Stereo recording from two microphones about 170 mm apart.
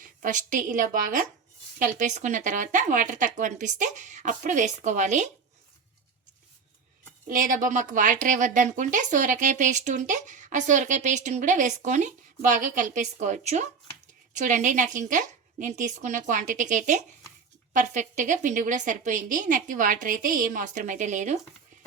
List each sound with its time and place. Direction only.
0.0 s speech: 50° right (ahead or behind)
7.3 s speech: 55° right (ahead or behind)